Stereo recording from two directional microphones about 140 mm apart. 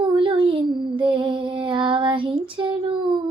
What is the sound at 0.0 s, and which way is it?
Child singing, 35° right (ahead or behind).